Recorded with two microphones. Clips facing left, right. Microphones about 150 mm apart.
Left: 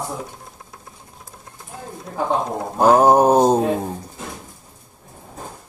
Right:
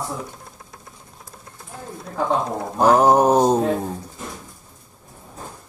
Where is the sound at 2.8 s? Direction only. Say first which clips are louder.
Left 2 dB; 20° left (ahead or behind).